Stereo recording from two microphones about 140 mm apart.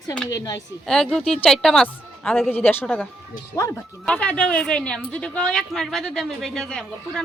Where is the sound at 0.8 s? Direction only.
5° left (ahead or behind).